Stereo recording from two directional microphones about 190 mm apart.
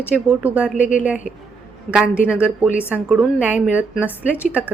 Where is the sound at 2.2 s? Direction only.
5° right (ahead or behind).